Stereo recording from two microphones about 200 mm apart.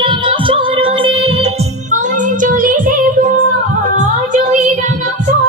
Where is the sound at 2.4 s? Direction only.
40° right (ahead or behind).